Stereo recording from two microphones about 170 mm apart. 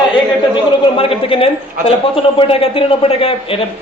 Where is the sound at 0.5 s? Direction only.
35° left (ahead or behind).